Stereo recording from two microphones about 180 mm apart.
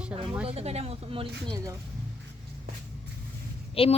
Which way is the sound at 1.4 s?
20° right (ahead or behind).